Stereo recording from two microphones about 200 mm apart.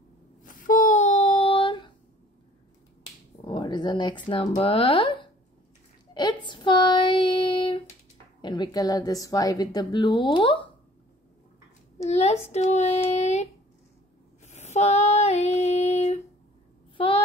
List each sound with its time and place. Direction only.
0.5 s child singing: 40° left (ahead or behind); by 1.9 s 25° left (ahead or behind)
3.4 s speech: 25° left (ahead or behind)
6.1 s child singing: 20° left (ahead or behind)
8.4 s a woman's voice: 20° left (ahead or behind)
12.0 s child singing: 35° left (ahead or behind)
14.4 s female singing: 35° left (ahead or behind)
16.9 s a sound: 25° left (ahead or behind)